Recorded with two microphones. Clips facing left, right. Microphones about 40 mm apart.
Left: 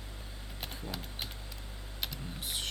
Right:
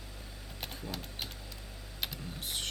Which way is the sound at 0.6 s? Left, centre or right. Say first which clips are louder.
Even; centre.